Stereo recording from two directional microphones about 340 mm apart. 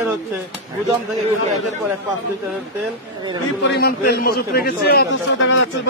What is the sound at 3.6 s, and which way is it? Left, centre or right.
A man's voice, left.